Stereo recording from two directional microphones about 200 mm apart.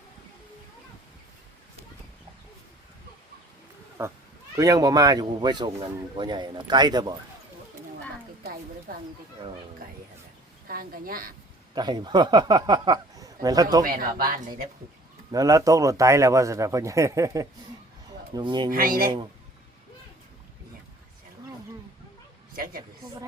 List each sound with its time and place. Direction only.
4.0 s speech: 10° right (ahead or behind)
10.7 s speech: 45° right (ahead or behind)
11.7 s speech: 20° right (ahead or behind)
13.8 s speech: 45° right (ahead or behind)
15.3 s speech: 15° right (ahead or behind)
18.7 s speech: 45° right (ahead or behind)
22.5 s speech: 45° right (ahead or behind)